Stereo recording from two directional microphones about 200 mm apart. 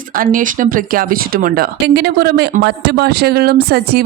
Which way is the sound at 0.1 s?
45° right (ahead or behind).